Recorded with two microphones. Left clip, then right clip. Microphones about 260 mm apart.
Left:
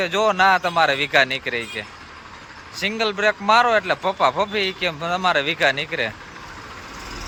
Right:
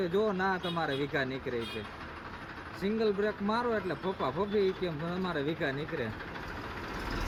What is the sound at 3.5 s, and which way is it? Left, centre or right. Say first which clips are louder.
Speech: left 16 dB; left.